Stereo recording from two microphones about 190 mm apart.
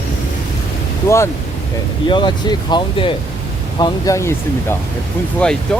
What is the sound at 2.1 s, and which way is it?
Speech, 25° left (ahead or behind).